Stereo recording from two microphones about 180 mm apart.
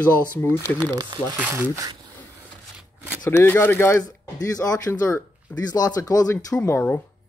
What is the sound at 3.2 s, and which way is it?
Speech, 10° left (ahead or behind).